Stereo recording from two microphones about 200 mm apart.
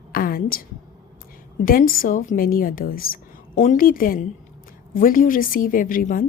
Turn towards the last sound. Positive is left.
turn(degrees=45)  # may be behind; listen again after turning